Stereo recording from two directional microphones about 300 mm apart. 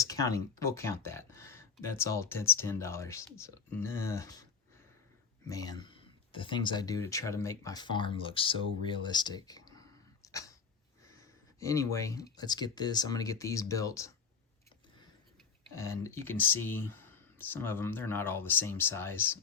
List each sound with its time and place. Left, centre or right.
0.0 s speech: centre
5.5 s speech: centre
10.2 s cat: centre
11.2 s a sound: centre
12.4 s speech: centre
15.7 s speech: centre